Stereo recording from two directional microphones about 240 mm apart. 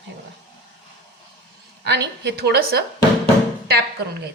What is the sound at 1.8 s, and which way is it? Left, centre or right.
A man's voice, right.